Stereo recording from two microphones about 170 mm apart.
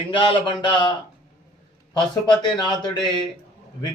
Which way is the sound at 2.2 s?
25° left (ahead or behind).